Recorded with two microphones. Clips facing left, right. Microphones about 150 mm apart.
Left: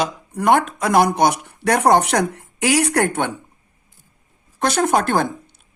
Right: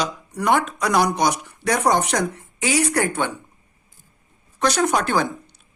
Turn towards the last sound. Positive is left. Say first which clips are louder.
# left 2 dB
turn(degrees=50)  # may be behind; listen again after turning